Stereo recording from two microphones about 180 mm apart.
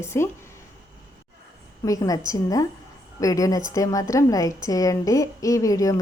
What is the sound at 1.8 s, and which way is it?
A woman's voice, 20° left (ahead or behind).